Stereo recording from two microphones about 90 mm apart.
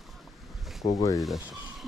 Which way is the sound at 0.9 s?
40° left (ahead or behind).